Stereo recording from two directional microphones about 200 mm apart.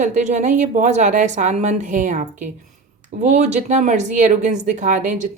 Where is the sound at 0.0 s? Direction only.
35° right (ahead or behind).